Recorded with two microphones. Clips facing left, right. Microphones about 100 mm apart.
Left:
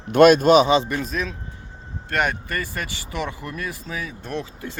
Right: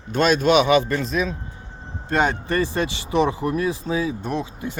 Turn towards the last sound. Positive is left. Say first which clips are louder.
# right 3 dB
turn(degrees=-15)  # may be behind; listen again after turning